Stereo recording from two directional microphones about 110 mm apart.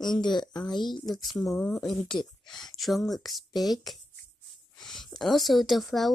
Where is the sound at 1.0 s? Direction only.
Centre (ahead or behind).